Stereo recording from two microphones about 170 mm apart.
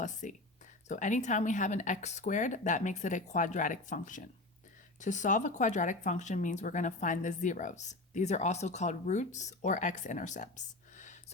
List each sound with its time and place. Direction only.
0.0 s speech: 45° left (ahead or behind)
10.9 s whispering: 45° left (ahead or behind)